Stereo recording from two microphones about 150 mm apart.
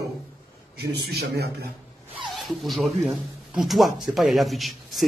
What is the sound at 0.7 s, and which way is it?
Speech, 90° right.